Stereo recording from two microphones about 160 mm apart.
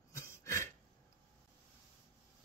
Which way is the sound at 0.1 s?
15° left (ahead or behind).